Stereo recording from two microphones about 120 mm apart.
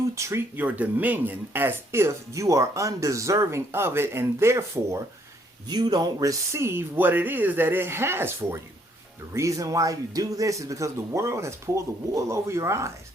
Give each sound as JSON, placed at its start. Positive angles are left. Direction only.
{"t": 0.2, "sound": "speech", "side_deg": -20}
{"t": 5.6, "sound": "speech", "side_deg": -35}